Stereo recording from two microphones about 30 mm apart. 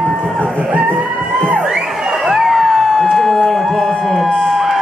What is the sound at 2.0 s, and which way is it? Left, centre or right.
Crowd, centre.